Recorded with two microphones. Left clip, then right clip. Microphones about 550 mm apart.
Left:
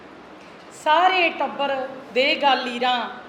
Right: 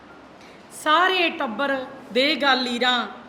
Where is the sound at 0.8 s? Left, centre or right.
Right.